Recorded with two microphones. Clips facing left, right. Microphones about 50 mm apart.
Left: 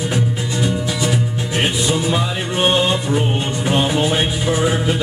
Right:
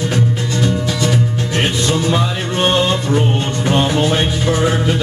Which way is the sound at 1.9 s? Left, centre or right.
Centre.